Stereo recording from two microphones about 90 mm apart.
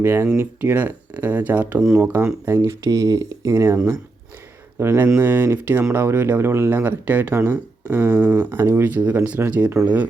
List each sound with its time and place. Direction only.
0.0 s speech: 25° right (ahead or behind)
1.8 s speech: 10° right (ahead or behind)
2.2 s speech: 35° right (ahead or behind)
3.5 s speech: 30° right (ahead or behind)
4.8 s speech: 30° right (ahead or behind)